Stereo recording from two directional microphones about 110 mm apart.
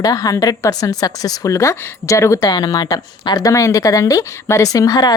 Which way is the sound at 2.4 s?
40° left (ahead or behind).